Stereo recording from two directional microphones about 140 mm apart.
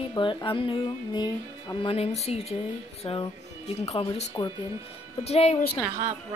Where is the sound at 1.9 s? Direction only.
50° left (ahead or behind).